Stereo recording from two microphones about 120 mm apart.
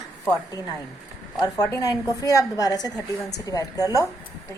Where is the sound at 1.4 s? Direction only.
35° left (ahead or behind).